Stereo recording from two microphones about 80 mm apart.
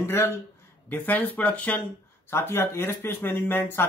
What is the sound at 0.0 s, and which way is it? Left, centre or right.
Speech, left.